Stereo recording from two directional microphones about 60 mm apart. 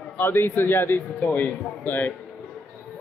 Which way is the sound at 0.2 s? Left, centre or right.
Left.